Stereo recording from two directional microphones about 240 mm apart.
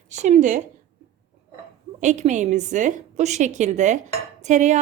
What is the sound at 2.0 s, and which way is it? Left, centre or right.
A woman's voice, right.